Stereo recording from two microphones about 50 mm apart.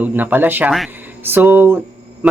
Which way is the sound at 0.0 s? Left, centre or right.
Right.